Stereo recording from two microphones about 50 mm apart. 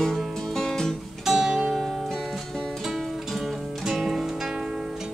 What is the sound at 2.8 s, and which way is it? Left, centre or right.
Music, centre.